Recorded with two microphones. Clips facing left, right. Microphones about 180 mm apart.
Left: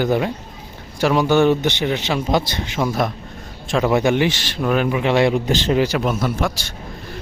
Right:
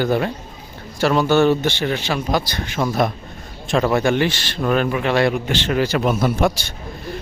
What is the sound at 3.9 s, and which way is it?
Speech, 15° left (ahead or behind).